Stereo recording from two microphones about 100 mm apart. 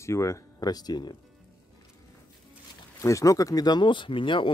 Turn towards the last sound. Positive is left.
turn(degrees=55)  # may be behind; listen again after turning